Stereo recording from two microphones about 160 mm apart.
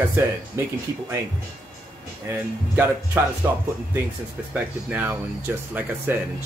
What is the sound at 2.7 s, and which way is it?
Speech, 10° right (ahead or behind).